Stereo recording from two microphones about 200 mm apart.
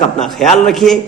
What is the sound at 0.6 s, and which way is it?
Speech, centre (ahead or behind).